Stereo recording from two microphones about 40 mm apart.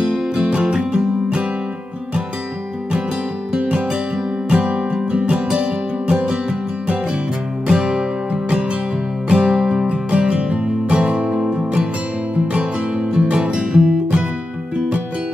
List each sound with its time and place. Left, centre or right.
0.6 s music: right
3.5 s music: right
7.6 s music: centre